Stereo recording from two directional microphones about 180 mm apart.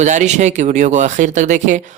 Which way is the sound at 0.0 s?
40° right (ahead or behind).